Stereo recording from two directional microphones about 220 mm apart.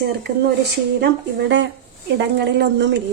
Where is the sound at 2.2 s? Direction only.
50° right (ahead or behind).